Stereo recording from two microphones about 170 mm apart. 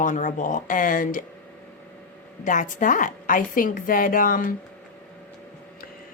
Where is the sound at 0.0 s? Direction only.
50° left (ahead or behind).